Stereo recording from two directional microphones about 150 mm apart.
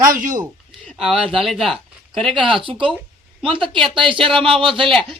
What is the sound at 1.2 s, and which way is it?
Speech, 35° right (ahead or behind).